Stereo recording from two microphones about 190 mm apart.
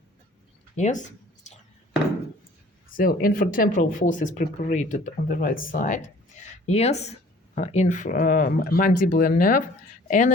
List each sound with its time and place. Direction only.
0.8 s a woman's voice: 40° left (ahead or behind)
2.9 s speech: 50° left (ahead or behind)
6.7 s a woman's voice: 35° left (ahead or behind)